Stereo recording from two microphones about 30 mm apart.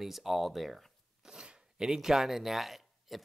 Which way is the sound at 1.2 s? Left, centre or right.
Right.